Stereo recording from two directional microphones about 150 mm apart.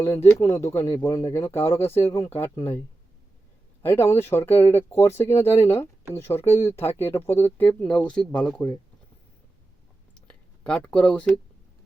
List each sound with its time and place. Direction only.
0.0 s speech: 15° left (ahead or behind)
3.8 s speech: 15° left (ahead or behind)
10.2 s speech: 5° left (ahead or behind)